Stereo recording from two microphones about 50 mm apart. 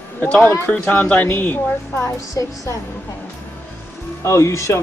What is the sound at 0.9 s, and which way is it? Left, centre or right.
Speech, left.